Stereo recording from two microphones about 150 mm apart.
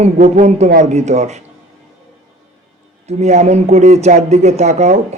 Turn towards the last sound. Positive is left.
turn(degrees=-50)  # may be behind; listen again after turning